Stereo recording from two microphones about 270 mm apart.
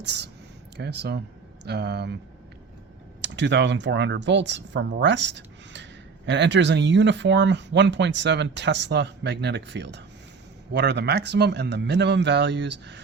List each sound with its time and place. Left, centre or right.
0.0 s speech: right
3.2 s speech: right